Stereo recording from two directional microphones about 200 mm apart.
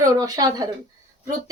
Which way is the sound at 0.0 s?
15° right (ahead or behind).